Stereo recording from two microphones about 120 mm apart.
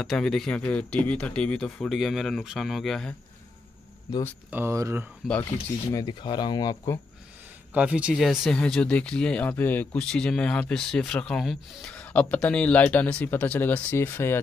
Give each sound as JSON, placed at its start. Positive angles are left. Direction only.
{"t": 0.0, "sound": "speech", "side_deg": 0}
{"t": 4.5, "sound": "speech", "side_deg": -20}
{"t": 5.2, "sound": "speech", "side_deg": -5}
{"t": 6.0, "sound": "speech", "side_deg": 40}
{"t": 7.7, "sound": "speech", "side_deg": -10}